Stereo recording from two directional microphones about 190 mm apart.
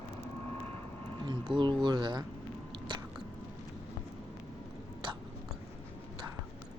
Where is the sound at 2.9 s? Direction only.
25° right (ahead or behind).